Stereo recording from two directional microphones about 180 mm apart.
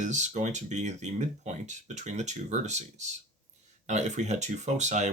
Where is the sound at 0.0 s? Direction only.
40° right (ahead or behind).